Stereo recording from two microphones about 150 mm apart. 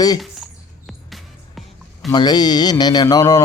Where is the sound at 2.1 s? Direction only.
30° left (ahead or behind).